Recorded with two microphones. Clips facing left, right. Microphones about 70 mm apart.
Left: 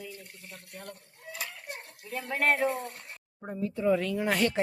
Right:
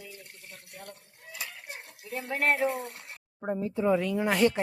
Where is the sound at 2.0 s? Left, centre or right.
Centre.